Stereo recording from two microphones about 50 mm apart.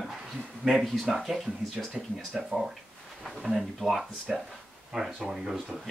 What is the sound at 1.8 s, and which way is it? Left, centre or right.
Speech, centre.